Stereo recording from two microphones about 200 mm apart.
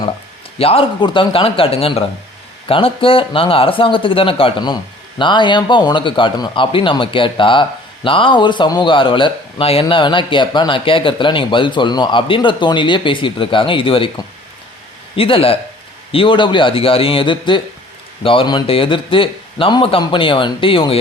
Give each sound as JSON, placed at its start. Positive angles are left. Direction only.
{"t": 0.6, "sound": "a man's voice", "side_deg": 30}
{"t": 15.1, "sound": "a man's voice", "side_deg": 25}